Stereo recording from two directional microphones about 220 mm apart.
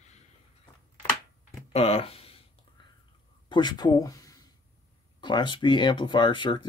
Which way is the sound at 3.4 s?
20° left (ahead or behind).